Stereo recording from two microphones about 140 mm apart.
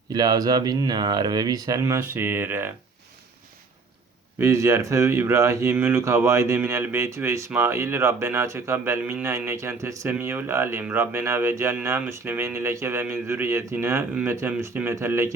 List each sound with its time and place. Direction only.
0.1 s speech: 30° right (ahead or behind)
4.4 s speech: 20° right (ahead or behind)